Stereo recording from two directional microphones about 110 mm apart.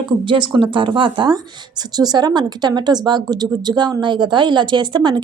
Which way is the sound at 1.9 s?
40° right (ahead or behind).